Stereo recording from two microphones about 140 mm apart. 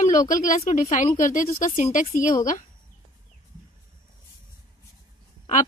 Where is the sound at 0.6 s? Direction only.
55° left (ahead or behind).